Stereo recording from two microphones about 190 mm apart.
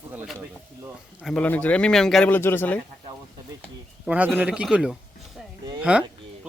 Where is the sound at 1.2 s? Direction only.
5° left (ahead or behind).